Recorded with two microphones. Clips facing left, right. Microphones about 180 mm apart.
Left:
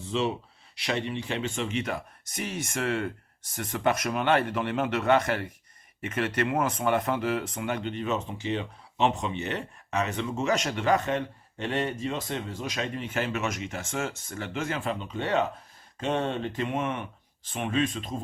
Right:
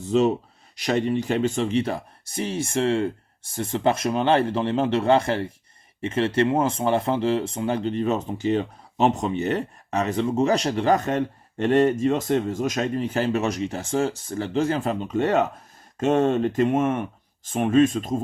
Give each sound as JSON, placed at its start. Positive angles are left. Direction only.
{"t": 0.0, "sound": "speech", "side_deg": -45}